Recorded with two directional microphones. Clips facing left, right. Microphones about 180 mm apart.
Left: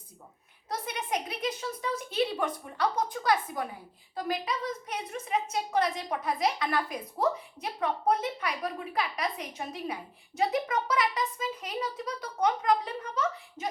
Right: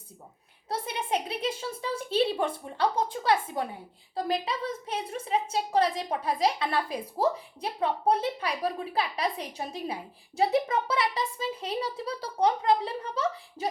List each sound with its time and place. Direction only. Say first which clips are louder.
0.7 s a woman's voice: right 3 dB; 30° right (ahead or behind)